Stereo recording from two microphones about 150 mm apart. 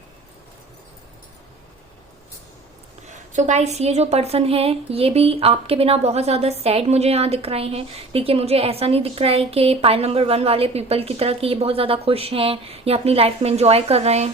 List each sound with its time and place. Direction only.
3.3 s a woman's voice: 50° right (ahead or behind)